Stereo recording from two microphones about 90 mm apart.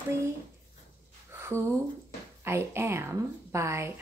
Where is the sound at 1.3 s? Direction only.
30° right (ahead or behind).